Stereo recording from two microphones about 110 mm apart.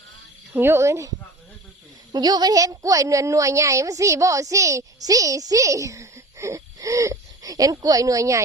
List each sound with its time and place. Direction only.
0.5 s speech: 20° right (ahead or behind)
2.1 s a woman's voice: 40° right (ahead or behind)